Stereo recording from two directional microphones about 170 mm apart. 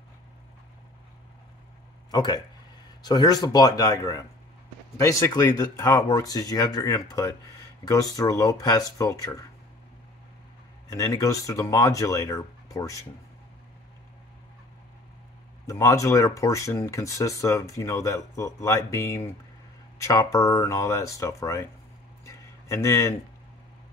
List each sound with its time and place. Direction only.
2.0 s speech: 25° left (ahead or behind)
10.9 s speech: 20° left (ahead or behind)
15.6 s speech: 20° left (ahead or behind)
22.2 s a sound: 20° left (ahead or behind)